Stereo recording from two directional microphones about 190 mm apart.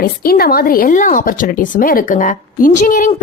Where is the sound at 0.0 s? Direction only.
50° left (ahead or behind).